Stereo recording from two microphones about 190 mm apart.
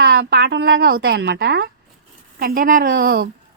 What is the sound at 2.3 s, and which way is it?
Speech, 50° right (ahead or behind).